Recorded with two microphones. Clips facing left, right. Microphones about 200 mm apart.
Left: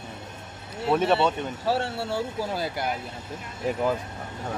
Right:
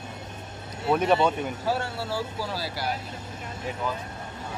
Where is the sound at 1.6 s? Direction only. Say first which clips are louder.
Left 5 dB; 30° left (ahead or behind).